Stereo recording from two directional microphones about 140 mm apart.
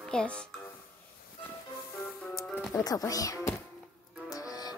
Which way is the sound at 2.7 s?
25° left (ahead or behind).